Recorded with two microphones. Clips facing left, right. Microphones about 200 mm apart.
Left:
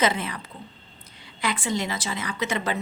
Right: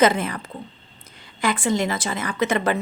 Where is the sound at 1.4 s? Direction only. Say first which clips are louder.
Right 5 dB; 50° right (ahead or behind).